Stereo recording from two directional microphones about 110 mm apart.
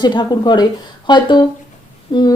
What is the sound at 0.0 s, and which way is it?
A woman's voice, 40° left (ahead or behind).